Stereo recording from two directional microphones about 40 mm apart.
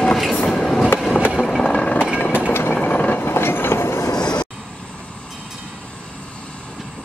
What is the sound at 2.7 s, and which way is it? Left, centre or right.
Vehicle, left.